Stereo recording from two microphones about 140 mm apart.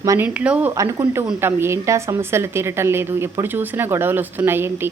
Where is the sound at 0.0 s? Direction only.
20° right (ahead or behind).